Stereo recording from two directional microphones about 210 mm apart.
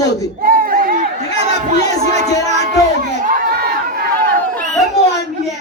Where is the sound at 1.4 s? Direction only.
35° right (ahead or behind).